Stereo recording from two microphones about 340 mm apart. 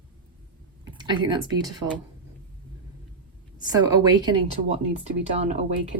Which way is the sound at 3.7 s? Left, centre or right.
Centre.